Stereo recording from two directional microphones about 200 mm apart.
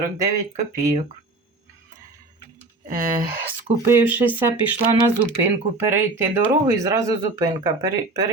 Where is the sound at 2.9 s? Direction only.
45° right (ahead or behind).